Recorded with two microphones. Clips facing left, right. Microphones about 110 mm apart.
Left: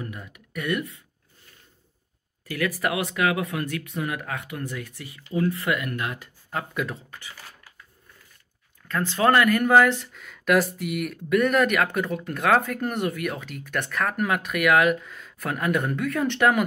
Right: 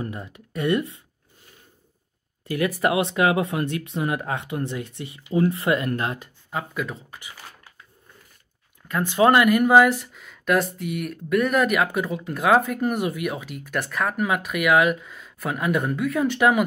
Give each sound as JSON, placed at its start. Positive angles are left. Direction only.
{"t": 0.0, "sound": "speech", "side_deg": -30}
{"t": 2.4, "sound": "speech", "side_deg": -25}
{"t": 6.5, "sound": "speech", "side_deg": 0}
{"t": 7.1, "sound": "a sound", "side_deg": -15}
{"t": 8.8, "sound": "speech", "side_deg": -15}